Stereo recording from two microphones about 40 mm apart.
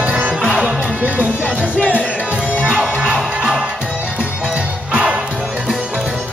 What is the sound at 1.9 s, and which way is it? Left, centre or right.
Music, left.